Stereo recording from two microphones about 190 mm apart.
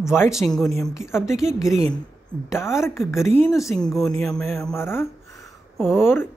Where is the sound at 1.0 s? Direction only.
15° left (ahead or behind).